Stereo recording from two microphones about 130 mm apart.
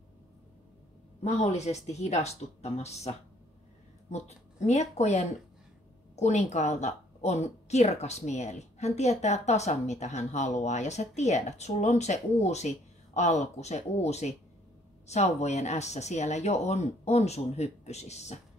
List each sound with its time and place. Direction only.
1.2 s a woman's voice: 55° left (ahead or behind)